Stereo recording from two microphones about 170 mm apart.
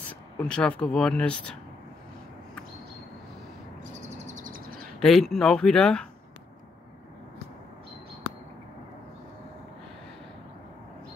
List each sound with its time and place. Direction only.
0.4 s speech: 5° left (ahead or behind)
4.0 s a sound: 45° right (ahead or behind)
5.0 s speech: centre (ahead or behind)